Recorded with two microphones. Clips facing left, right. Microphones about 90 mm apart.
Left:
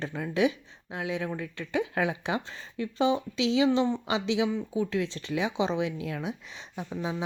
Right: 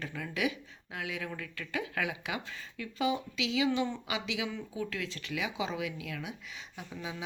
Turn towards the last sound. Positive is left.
turn(degrees=35)  # may be behind; listen again after turning